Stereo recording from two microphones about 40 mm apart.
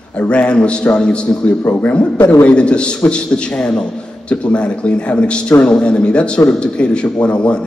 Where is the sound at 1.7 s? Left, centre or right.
Left.